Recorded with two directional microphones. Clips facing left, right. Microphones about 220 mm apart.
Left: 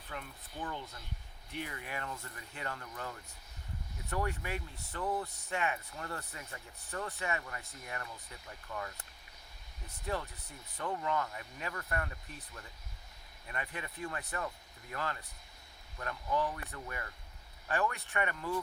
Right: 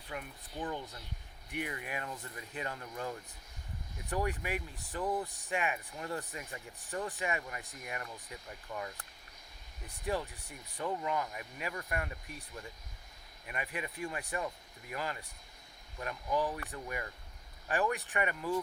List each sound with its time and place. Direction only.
0.1 s speech: 15° right (ahead or behind)